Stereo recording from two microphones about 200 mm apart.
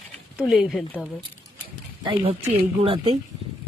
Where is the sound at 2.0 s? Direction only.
25° right (ahead or behind).